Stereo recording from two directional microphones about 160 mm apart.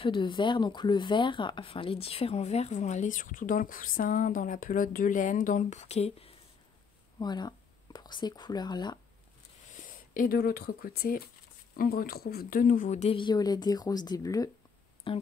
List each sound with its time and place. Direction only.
0.0 s speech: 30° left (ahead or behind)
7.2 s speech: 25° left (ahead or behind)
9.8 s speech: 60° left (ahead or behind)
13.2 s a woman's voice: 25° left (ahead or behind)
15.1 s speech: 35° left (ahead or behind)